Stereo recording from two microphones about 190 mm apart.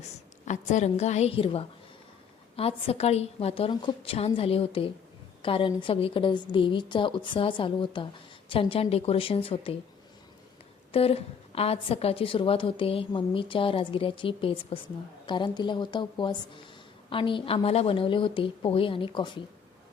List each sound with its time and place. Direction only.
0.0 s a woman's voice: 40° left (ahead or behind)
10.9 s a woman's voice: 30° left (ahead or behind)